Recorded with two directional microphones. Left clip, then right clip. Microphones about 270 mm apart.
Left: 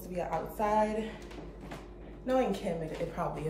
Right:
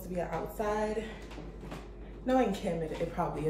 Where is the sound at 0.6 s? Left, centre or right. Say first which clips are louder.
Left 3 dB; centre.